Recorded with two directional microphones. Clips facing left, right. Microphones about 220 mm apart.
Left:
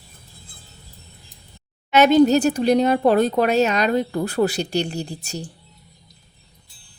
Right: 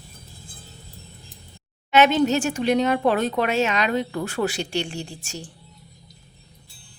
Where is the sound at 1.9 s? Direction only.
40° left (ahead or behind).